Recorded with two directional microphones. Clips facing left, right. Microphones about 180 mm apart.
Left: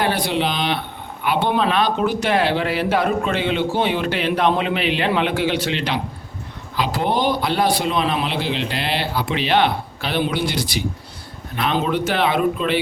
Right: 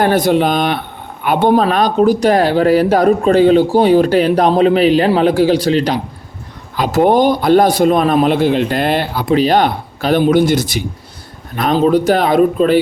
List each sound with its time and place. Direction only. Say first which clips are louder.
0.0 s a man's voice: right 8 dB; 45° right (ahead or behind)